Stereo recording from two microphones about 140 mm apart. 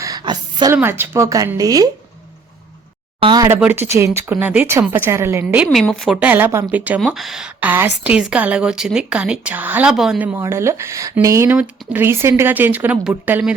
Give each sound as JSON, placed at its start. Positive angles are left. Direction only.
{"t": 0.0, "sound": "a sound", "side_deg": -30}
{"t": 0.7, "sound": "speech", "side_deg": -15}
{"t": 3.2, "sound": "speech", "side_deg": -35}
{"t": 3.6, "sound": "a woman's voice", "side_deg": -15}
{"t": 5.7, "sound": "a woman's voice", "side_deg": 0}
{"t": 6.1, "sound": "a woman's voice", "side_deg": -15}
{"t": 10.3, "sound": "a woman's voice", "side_deg": -20}